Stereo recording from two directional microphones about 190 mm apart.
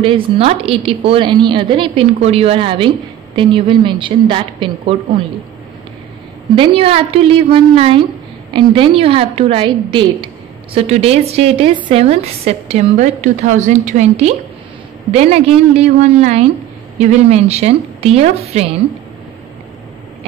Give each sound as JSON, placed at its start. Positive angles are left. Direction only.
{"t": 0.0, "sound": "a woman's voice", "side_deg": -30}
{"t": 6.5, "sound": "a woman's voice", "side_deg": -30}